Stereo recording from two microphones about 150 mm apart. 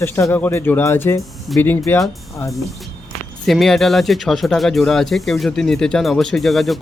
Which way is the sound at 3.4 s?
Centre (ahead or behind).